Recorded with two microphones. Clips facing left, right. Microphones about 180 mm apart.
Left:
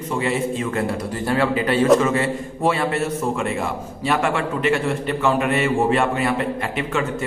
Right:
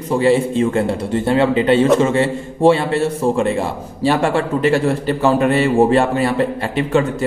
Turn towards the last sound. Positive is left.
turn(degrees=-30)  # may be behind; listen again after turning